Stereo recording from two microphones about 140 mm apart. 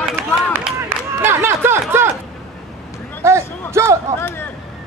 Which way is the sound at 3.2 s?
20° right (ahead or behind).